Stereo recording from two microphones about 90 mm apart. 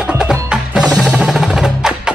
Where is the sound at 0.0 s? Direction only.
10° right (ahead or behind).